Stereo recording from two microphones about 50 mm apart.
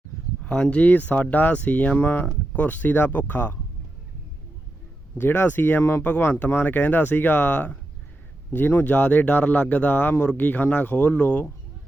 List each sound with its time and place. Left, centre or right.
0.4 s speech: left
0.8 s speech: left
5.1 s speech: left
10.9 s speech: left